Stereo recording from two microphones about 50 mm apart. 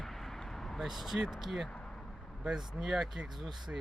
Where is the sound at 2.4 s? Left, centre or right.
Centre.